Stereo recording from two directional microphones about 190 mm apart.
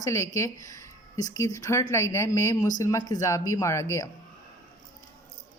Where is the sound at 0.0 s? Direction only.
15° left (ahead or behind).